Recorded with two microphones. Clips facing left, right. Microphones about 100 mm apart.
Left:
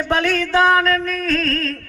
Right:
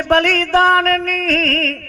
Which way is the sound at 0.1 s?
65° right (ahead or behind).